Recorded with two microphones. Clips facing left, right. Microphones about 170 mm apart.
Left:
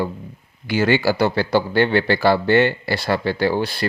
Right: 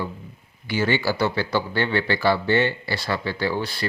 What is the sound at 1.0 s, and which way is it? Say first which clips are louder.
Speech: left 5 dB; 35° left (ahead or behind).